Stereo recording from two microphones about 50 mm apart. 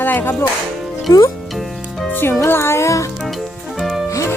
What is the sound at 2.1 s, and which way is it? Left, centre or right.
Speech, left.